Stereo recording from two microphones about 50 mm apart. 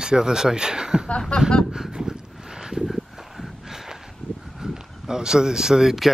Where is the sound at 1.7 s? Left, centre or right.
Centre.